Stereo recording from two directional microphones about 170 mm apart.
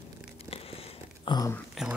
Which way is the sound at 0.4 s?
35° left (ahead or behind).